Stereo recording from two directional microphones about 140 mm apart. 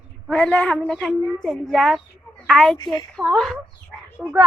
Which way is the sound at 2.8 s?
30° left (ahead or behind).